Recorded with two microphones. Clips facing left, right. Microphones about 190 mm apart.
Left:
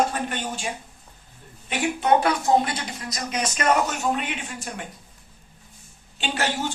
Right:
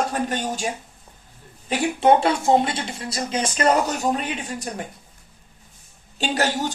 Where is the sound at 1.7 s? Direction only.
30° right (ahead or behind).